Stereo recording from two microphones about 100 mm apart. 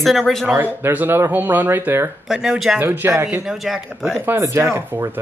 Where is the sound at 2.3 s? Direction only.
5° right (ahead or behind).